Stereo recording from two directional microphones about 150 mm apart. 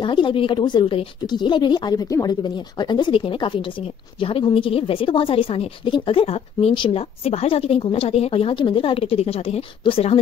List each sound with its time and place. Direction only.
0.0 s speech: 35° left (ahead or behind)